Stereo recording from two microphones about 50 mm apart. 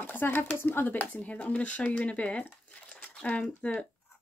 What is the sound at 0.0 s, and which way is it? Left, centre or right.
Speech, left.